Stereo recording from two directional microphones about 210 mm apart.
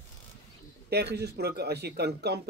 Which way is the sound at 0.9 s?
50° right (ahead or behind).